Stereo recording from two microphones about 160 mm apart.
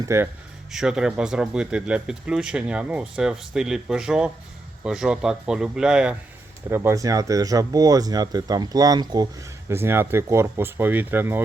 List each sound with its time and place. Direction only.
0.0 s speech: 15° right (ahead or behind)
0.7 s speech: 5° right (ahead or behind)
6.7 s speech: 15° right (ahead or behind)